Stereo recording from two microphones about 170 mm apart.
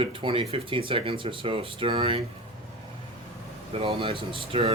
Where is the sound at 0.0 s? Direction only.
30° right (ahead or behind).